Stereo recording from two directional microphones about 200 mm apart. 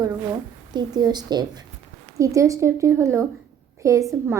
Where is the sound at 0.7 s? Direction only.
20° right (ahead or behind).